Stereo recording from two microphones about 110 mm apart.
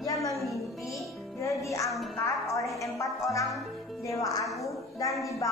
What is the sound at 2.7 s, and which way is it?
A woman's voice, 30° left (ahead or behind).